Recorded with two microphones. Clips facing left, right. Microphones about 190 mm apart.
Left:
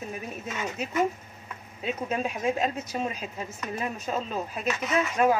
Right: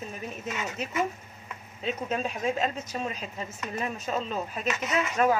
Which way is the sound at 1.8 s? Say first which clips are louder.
Left 1 dB; 10° left (ahead or behind).